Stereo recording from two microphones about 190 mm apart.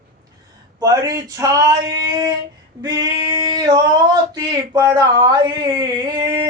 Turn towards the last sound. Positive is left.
turn(degrees=-20)  # may be behind; listen again after turning